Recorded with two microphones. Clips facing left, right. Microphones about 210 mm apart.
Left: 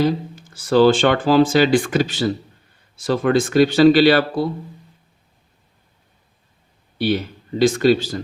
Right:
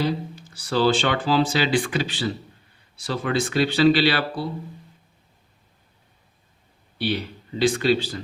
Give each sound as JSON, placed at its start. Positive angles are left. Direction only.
{"t": 0.0, "sound": "speech", "side_deg": 50}
{"t": 7.0, "sound": "speech", "side_deg": 45}